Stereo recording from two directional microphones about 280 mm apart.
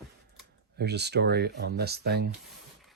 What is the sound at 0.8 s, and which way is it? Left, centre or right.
Speech, right.